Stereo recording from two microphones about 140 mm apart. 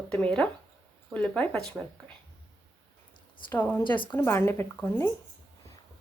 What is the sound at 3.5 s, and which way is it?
Speech, 15° left (ahead or behind).